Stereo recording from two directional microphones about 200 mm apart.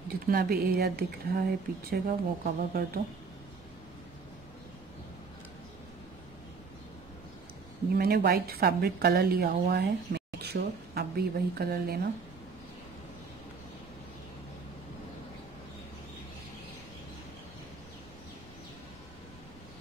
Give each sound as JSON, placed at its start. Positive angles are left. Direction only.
{"t": 0.1, "sound": "a woman's voice", "side_deg": -50}
{"t": 7.9, "sound": "a woman's voice", "side_deg": -50}